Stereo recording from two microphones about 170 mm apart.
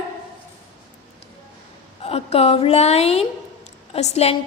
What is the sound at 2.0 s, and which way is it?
A woman's voice, 35° left (ahead or behind).